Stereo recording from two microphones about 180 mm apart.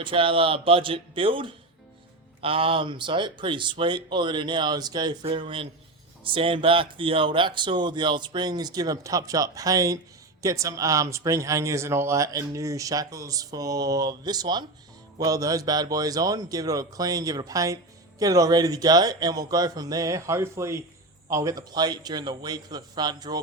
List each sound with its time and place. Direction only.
0.0 s speech: 30° right (ahead or behind)